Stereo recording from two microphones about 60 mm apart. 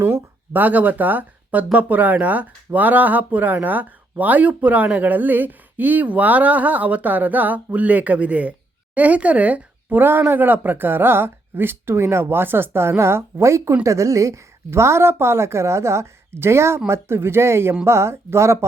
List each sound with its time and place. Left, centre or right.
0.0 s speech: right
10.0 s a woman's voice: right